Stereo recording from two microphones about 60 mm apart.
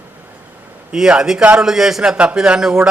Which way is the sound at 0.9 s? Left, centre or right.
Centre.